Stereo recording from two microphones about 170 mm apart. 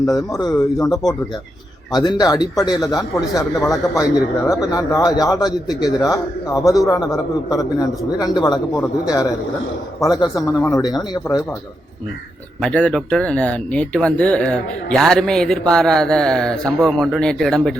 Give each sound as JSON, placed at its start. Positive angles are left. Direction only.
{"t": 0.3, "sound": "a man's voice", "side_deg": 20}
{"t": 10.0, "sound": "a man's voice", "side_deg": 25}
{"t": 12.6, "sound": "speech", "side_deg": 5}